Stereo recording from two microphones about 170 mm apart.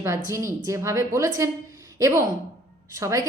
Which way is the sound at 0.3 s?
20° right (ahead or behind).